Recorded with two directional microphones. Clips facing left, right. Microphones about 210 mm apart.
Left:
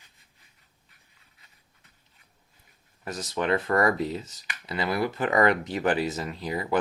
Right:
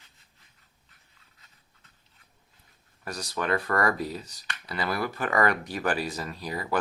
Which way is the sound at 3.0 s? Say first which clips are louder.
Left 3 dB; 20° left (ahead or behind).